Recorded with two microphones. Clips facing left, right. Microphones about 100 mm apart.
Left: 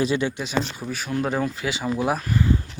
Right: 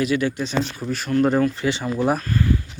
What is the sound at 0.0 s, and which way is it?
Speech, 25° left (ahead or behind).